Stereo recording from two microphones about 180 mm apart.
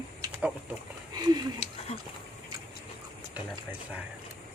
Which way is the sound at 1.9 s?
35° left (ahead or behind).